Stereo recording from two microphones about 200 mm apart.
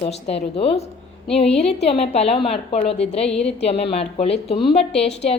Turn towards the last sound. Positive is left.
turn(degrees=30)  # may be behind; listen again after turning